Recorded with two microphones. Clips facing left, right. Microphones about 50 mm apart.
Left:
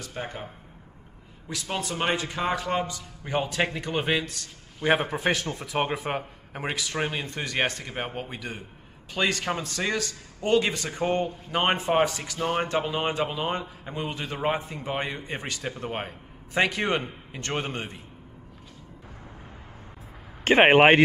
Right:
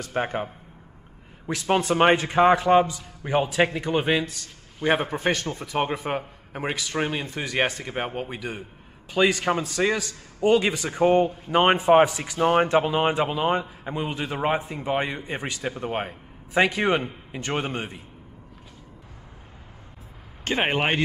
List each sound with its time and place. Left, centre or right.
0.0 s speech: right
1.5 s a man's voice: right
3.3 s a man's voice: centre
20.4 s speech: left